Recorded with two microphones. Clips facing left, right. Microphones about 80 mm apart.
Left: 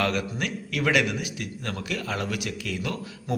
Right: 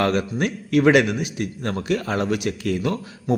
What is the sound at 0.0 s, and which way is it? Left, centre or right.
A man's voice, right.